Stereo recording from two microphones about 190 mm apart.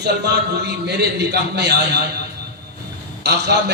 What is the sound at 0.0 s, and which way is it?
A man's voice, 65° right (ahead or behind).